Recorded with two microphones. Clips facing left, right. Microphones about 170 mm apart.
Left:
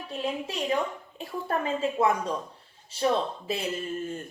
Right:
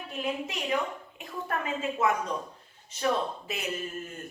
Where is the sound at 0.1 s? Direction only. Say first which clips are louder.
Left 1 dB; 30° left (ahead or behind).